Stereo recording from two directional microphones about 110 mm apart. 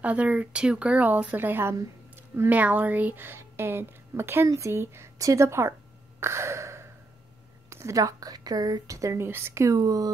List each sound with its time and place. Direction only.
0.0 s a woman's voice: 10° right (ahead or behind); by 10.1 s 35° right (ahead or behind)